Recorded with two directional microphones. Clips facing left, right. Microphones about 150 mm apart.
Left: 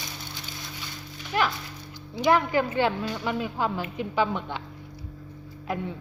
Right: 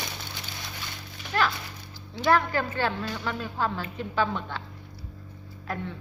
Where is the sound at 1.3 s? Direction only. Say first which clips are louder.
Left 1 dB; 15° left (ahead or behind).